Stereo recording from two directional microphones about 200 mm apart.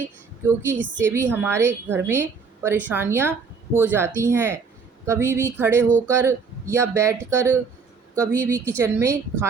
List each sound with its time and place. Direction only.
0.4 s a woman's voice: 10° right (ahead or behind)